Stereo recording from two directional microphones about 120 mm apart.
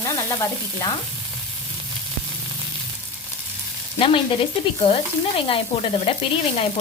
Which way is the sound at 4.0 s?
50° left (ahead or behind).